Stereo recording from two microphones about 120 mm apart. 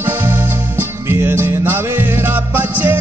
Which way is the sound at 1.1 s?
20° right (ahead or behind).